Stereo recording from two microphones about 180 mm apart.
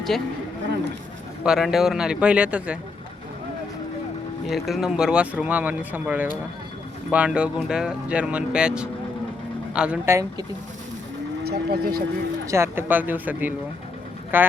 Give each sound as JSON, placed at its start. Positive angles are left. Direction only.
{"t": 1.5, "sound": "speech", "side_deg": 0}
{"t": 4.4, "sound": "speech", "side_deg": 0}
{"t": 11.4, "sound": "speech", "side_deg": -60}
{"t": 12.5, "sound": "speech", "side_deg": -15}